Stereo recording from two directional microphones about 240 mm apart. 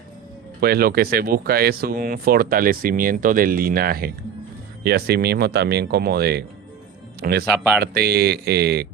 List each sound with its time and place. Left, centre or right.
0.6 s a man's voice: right